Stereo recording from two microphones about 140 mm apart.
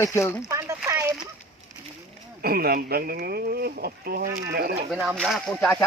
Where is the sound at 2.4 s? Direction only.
90° right.